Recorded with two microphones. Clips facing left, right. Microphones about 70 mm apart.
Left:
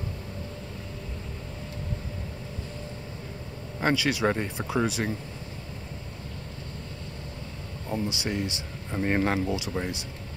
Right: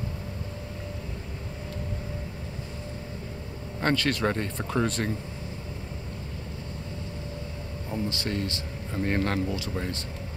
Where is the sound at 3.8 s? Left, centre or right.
Centre.